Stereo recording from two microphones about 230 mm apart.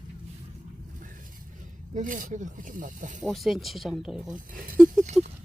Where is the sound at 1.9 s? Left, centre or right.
Right.